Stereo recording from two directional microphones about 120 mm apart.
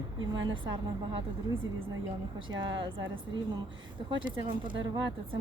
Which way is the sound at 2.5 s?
40° right (ahead or behind).